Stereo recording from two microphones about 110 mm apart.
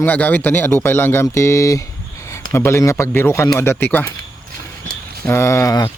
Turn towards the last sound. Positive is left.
turn(degrees=30)  # may be behind; listen again after turning